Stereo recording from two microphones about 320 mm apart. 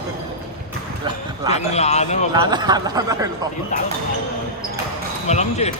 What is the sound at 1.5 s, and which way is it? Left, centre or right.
Speech, centre.